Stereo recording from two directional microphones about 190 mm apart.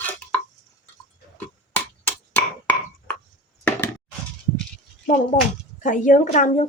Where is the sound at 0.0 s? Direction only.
10° left (ahead or behind).